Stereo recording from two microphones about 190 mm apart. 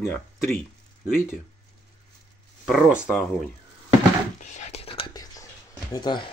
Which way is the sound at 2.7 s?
Centre (ahead or behind).